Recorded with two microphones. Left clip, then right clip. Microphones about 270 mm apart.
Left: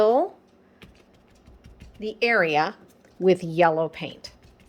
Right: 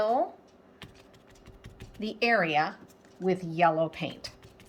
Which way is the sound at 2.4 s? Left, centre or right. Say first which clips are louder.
Left 5 dB; left.